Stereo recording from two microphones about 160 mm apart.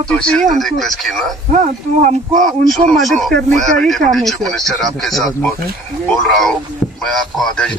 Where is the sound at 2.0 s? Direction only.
55° right (ahead or behind).